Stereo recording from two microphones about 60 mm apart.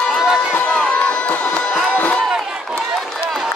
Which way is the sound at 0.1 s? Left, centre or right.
Centre.